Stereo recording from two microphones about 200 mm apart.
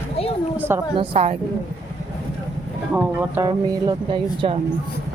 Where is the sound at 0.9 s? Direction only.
30° right (ahead or behind).